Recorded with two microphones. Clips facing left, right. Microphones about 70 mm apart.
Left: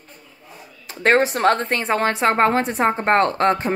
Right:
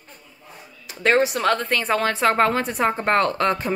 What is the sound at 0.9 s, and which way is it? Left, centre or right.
Speech, left.